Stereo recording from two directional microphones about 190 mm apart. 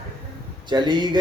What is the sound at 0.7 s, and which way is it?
Speech, 25° right (ahead or behind).